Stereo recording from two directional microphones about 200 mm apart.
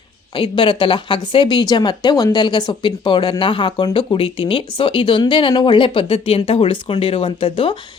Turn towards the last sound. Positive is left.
turn(degrees=25)  # may be behind; listen again after turning